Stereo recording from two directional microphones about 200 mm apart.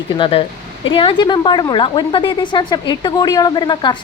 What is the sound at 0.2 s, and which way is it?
A woman's voice, 30° left (ahead or behind).